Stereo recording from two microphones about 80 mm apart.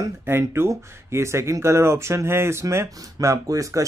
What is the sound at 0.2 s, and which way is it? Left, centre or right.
Speech, right.